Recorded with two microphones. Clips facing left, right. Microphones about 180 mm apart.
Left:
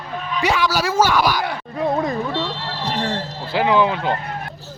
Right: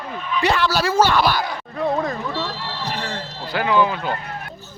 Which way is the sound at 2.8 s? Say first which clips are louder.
Left 5 dB; 40° left (ahead or behind).